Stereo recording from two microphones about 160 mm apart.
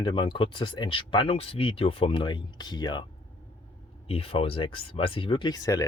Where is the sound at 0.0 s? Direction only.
30° left (ahead or behind).